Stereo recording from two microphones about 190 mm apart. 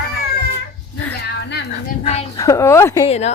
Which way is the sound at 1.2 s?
60° left (ahead or behind).